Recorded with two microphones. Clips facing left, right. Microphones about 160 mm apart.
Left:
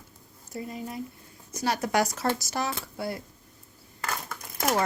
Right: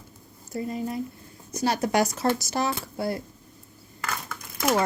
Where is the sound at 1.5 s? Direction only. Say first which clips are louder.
Right 3 dB; 30° right (ahead or behind).